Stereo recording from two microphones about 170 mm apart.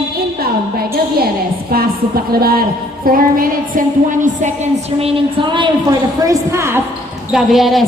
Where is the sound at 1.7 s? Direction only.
60° right (ahead or behind).